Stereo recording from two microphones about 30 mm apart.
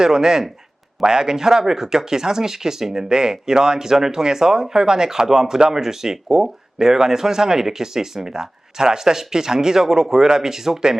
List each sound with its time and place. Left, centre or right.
0.0 s speech: right